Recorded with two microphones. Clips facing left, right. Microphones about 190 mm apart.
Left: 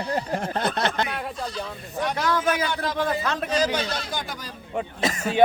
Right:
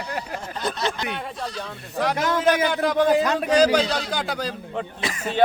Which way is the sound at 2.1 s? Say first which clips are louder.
Left 1 dB; 20° right (ahead or behind).